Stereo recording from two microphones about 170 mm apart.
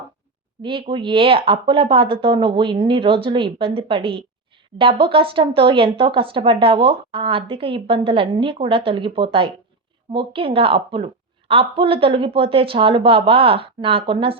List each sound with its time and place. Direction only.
0.6 s speech: 30° right (ahead or behind)